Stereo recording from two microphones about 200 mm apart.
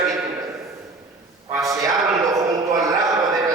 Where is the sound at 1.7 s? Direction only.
15° right (ahead or behind).